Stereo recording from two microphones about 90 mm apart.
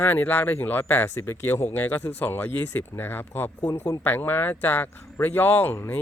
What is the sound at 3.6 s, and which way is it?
Speech, 50° left (ahead or behind).